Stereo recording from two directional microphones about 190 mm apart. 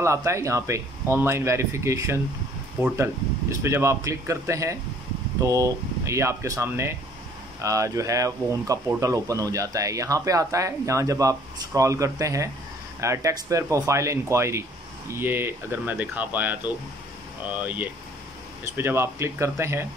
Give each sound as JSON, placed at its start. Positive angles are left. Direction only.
{"t": 0.0, "sound": "speech", "side_deg": -15}